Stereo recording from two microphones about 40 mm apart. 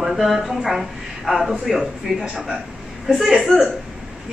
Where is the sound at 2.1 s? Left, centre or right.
Centre.